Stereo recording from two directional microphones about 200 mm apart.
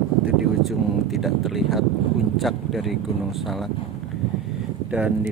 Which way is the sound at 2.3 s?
Centre (ahead or behind).